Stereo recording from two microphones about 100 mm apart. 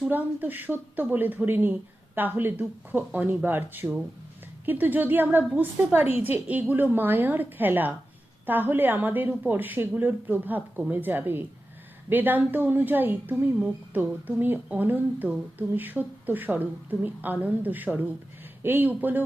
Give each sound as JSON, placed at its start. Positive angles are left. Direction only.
{"t": 0.1, "sound": "a woman's voice", "side_deg": -15}